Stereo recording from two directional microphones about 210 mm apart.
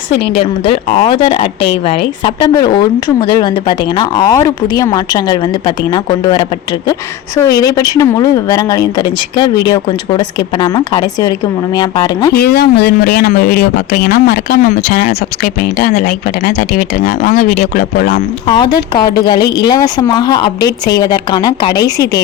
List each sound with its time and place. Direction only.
0.3 s speech: 25° left (ahead or behind)
12.3 s speech: 50° left (ahead or behind)
18.4 s speech: 20° left (ahead or behind)